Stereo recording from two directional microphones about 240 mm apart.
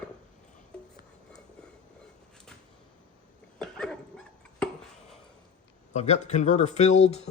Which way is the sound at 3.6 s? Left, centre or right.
Centre.